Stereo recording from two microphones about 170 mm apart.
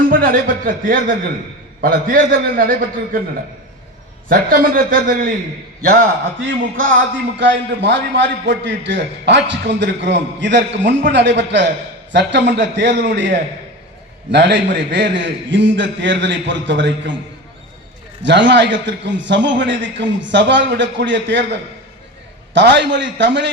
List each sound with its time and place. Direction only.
0.1 s a man's voice: 55° right (ahead or behind)
4.3 s a man's voice: 55° right (ahead or behind)
6.4 s a man's voice: 90° right
18.2 s a man's voice: 90° right